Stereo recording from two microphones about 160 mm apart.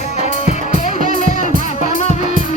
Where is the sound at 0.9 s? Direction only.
50° left (ahead or behind).